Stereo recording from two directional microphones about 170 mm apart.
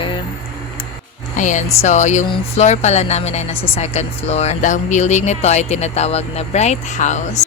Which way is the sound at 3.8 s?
40° left (ahead or behind).